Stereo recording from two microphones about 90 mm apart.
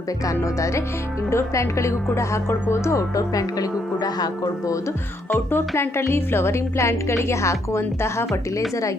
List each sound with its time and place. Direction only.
1.3 s a woman's voice: 35° left (ahead or behind)
5.5 s a woman's voice: 25° left (ahead or behind)